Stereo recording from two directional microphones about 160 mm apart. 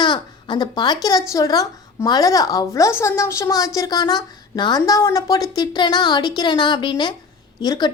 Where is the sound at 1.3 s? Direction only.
20° left (ahead or behind).